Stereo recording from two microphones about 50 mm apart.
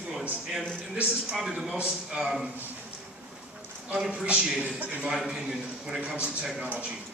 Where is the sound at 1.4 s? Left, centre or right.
Centre.